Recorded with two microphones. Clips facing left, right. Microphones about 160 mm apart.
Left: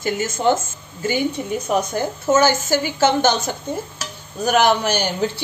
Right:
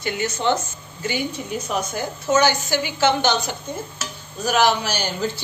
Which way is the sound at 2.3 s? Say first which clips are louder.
Left 2 dB; 45° left (ahead or behind).